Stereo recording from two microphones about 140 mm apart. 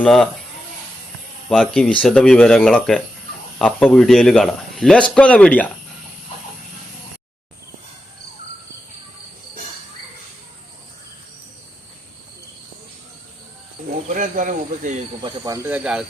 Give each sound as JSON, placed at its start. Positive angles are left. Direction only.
{"t": 0.0, "sound": "speech", "side_deg": 5}
{"t": 1.5, "sound": "a man's voice", "side_deg": 5}
{"t": 14.1, "sound": "speech", "side_deg": -70}
{"t": 15.4, "sound": "speech", "side_deg": -20}
{"t": 15.7, "sound": "speech", "side_deg": -5}